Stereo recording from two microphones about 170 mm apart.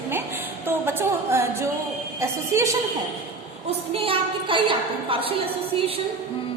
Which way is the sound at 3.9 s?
30° right (ahead or behind).